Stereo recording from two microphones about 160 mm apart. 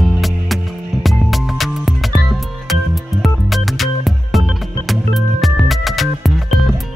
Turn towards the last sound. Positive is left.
turn(degrees=0)  # may be behind; listen again after turning